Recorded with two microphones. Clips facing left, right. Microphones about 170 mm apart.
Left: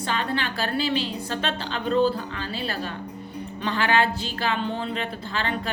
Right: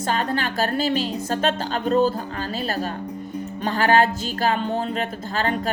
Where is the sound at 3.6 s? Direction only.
45° right (ahead or behind).